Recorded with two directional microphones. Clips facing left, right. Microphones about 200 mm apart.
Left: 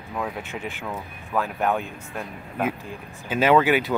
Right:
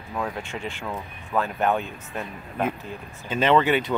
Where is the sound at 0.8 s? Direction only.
Centre (ahead or behind).